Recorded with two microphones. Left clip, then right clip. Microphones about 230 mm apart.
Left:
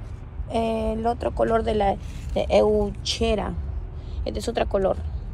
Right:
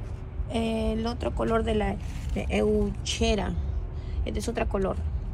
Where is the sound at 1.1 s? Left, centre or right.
Left.